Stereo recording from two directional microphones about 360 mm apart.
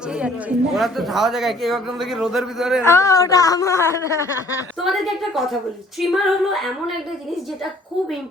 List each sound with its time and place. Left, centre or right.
0.1 s speech: centre